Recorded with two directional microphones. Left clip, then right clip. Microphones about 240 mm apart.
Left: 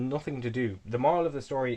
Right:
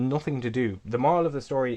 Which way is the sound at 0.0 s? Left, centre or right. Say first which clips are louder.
Right 4 dB; right.